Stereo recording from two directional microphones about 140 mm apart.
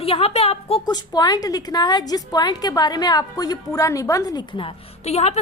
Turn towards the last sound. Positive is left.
turn(degrees=50)  # may be behind; listen again after turning